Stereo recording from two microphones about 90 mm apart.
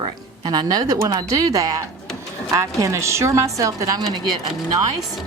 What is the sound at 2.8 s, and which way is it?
A woman's voice, 35° right (ahead or behind).